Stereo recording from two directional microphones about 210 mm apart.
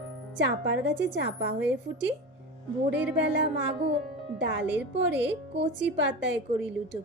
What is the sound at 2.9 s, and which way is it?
Speech, 5° right (ahead or behind).